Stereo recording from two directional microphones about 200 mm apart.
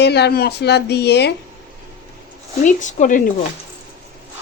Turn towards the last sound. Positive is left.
turn(degrees=40)  # may be behind; listen again after turning